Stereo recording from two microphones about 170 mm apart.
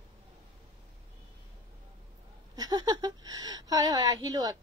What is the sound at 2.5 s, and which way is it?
Speech, 25° right (ahead or behind).